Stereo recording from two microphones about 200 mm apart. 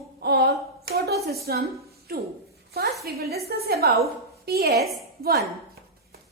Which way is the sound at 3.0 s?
50° right (ahead or behind).